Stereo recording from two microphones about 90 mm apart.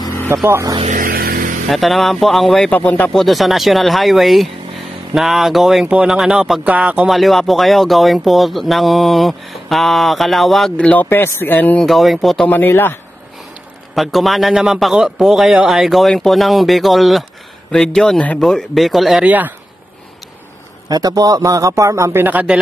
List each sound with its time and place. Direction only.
0.5 s a man's voice: 35° right (ahead or behind)
1.7 s speech: centre (ahead or behind)
2.7 s speech: 15° left (ahead or behind)
3.1 s speech: centre (ahead or behind); by 7.1 s 15° right (ahead or behind)
7.1 s speech: centre (ahead or behind)
10.8 s speech: 15° left (ahead or behind)
11.1 s speech: 25° left (ahead or behind)
11.8 s speech: centre (ahead or behind)
12.4 s speech: 25° left (ahead or behind)
13.9 s speech: centre (ahead or behind)
19.2 s speech: 20° right (ahead or behind)
20.9 s a man's voice: 45° right (ahead or behind)
22.2 s speech: 20° right (ahead or behind)